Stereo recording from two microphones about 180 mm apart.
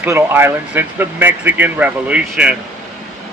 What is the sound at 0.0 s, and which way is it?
Speech, 10° right (ahead or behind).